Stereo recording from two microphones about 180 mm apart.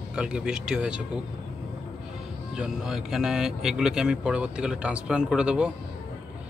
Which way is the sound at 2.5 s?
5° right (ahead or behind).